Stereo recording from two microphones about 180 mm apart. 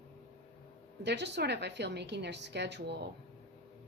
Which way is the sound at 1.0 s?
70° right (ahead or behind).